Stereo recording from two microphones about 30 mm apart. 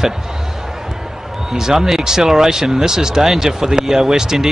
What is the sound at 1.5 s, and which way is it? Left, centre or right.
Speech, centre.